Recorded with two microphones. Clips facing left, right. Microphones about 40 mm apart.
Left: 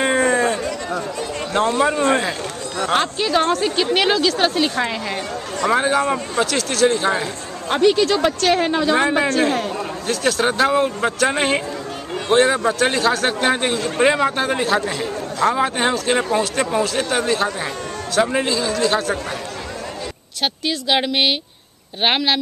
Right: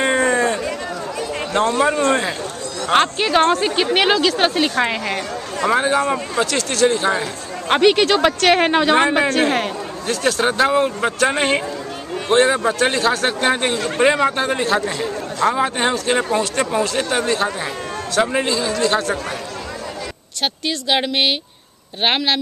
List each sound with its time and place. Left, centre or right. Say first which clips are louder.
0.0 s a sound: even; centre
1.5 s speech: right 1 dB; centre
3.0 s a woman's voice: right 5 dB; right
5.7 s speech: even; centre
7.6 s speech: right 2 dB; right
8.9 s speech: right 2 dB; right
10.0 s speech: right 1 dB; centre
20.4 s speech: even; centre